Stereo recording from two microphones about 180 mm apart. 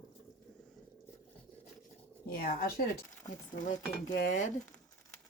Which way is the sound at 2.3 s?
60° left (ahead or behind).